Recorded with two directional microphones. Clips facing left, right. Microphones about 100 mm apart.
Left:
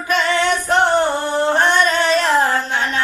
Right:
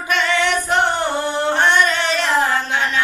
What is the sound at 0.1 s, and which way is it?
Music, 35° left (ahead or behind).